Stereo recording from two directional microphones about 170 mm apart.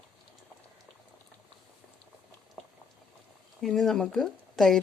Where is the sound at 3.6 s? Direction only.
Centre (ahead or behind).